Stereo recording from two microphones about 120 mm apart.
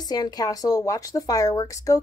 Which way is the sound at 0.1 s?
35° left (ahead or behind).